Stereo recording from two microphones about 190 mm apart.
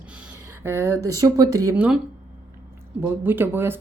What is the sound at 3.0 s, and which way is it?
Speech, 10° right (ahead or behind).